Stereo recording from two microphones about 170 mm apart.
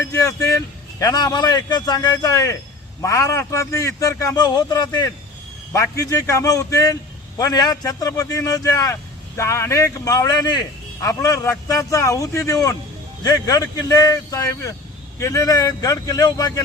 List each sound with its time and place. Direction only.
0.1 s a man's voice: 20° left (ahead or behind)